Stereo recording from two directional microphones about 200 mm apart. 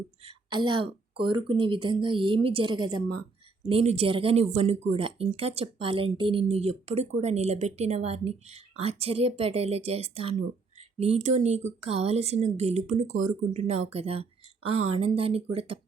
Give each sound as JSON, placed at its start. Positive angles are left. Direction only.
{"t": 0.2, "sound": "a woman's voice", "side_deg": -25}